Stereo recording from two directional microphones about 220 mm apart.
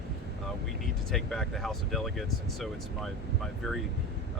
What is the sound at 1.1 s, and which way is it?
Speech, centre (ahead or behind).